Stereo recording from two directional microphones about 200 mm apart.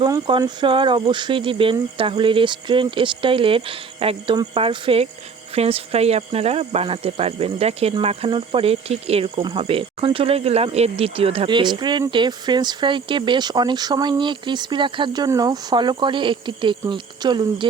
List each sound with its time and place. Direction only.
0.0 s speech: 20° right (ahead or behind)